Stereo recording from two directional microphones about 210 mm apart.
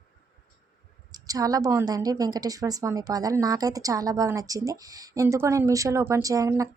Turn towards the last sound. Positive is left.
turn(degrees=-15)  # may be behind; listen again after turning